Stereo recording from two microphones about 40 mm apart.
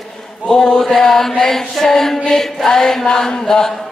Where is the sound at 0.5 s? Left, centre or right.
Centre.